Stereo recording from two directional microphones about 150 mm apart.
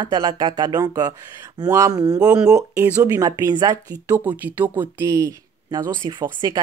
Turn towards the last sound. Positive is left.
turn(degrees=-30)  # may be behind; listen again after turning